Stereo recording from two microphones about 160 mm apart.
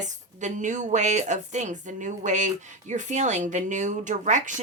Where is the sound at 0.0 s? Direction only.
50° right (ahead or behind).